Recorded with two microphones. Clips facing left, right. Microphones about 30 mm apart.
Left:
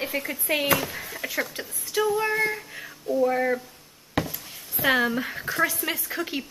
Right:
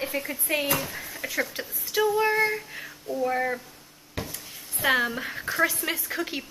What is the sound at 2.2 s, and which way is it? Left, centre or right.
Child singing, centre.